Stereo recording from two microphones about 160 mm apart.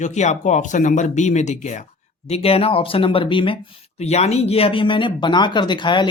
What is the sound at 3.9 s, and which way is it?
Speech, 40° left (ahead or behind).